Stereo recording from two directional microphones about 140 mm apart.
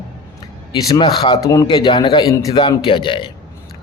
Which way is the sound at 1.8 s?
35° left (ahead or behind).